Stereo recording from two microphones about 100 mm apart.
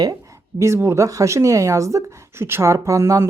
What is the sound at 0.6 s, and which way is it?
Speech, 25° right (ahead or behind).